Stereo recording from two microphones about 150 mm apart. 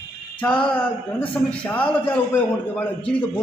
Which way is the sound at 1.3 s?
10° left (ahead or behind).